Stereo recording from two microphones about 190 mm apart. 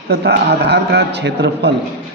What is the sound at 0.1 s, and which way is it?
A man's voice, 60° right (ahead or behind).